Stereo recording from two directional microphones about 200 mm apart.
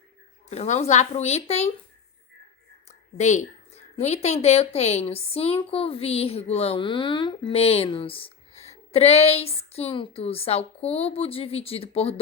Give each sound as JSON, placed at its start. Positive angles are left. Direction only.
{"t": 0.5, "sound": "speech", "side_deg": 30}
{"t": 3.2, "sound": "a woman's voice", "side_deg": 35}